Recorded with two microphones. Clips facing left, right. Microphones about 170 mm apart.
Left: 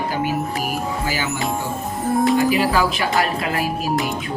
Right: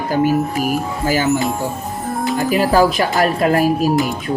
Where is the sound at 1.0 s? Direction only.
40° right (ahead or behind).